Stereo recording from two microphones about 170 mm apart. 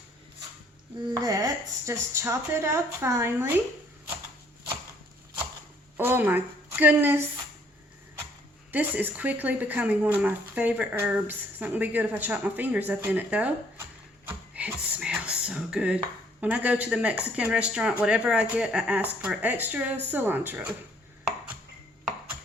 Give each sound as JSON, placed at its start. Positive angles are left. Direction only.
{"t": 1.1, "sound": "speech", "side_deg": -20}
{"t": 6.0, "sound": "a woman's voice", "side_deg": -10}
{"t": 8.7, "sound": "speech", "side_deg": -10}
{"t": 14.3, "sound": "a sound", "side_deg": -10}
{"t": 16.4, "sound": "speech", "side_deg": -10}